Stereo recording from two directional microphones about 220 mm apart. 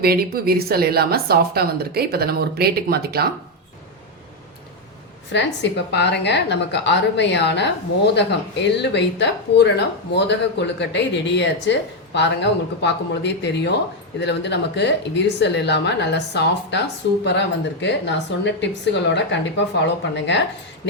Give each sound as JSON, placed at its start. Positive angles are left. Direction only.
{"t": 0.0, "sound": "speech", "side_deg": -45}
{"t": 5.3, "sound": "a woman's voice", "side_deg": 55}